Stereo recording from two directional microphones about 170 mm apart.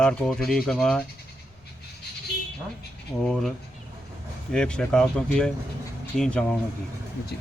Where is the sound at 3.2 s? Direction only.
5° left (ahead or behind).